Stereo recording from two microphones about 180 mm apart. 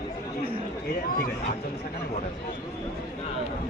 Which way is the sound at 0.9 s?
55° left (ahead or behind).